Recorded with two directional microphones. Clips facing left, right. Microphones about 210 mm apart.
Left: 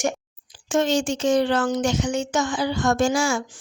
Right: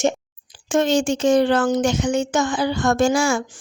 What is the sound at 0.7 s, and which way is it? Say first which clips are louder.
A woman's voice: right 3 dB; 55° right (ahead or behind).